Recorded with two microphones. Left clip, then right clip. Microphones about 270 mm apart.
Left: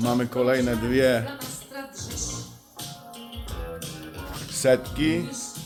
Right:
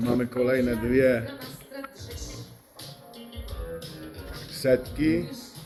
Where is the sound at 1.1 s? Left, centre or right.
Left.